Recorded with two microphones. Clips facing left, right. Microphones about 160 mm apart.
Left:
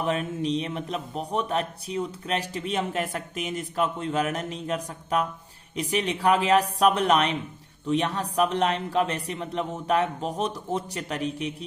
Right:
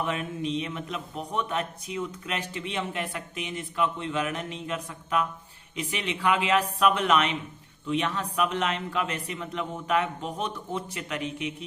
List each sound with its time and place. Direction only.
0.0 s a man's voice: 35° left (ahead or behind)